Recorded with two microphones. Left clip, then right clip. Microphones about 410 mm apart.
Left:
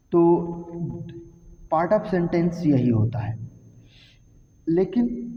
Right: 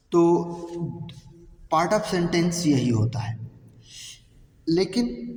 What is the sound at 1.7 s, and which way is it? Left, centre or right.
A man's voice, left.